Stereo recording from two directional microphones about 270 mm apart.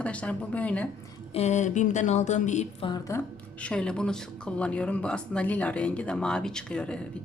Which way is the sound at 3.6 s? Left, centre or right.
Centre.